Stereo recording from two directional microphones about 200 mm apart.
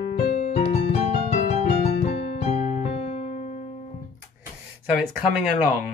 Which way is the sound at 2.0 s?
35° left (ahead or behind).